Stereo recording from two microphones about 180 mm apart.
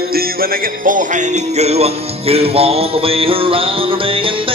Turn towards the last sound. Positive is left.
turn(degrees=-30)  # may be behind; listen again after turning